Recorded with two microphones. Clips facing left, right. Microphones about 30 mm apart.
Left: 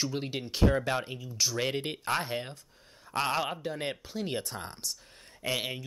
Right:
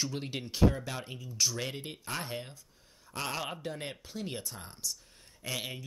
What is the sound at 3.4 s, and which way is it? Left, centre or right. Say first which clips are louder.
Speech: left 4 dB; centre.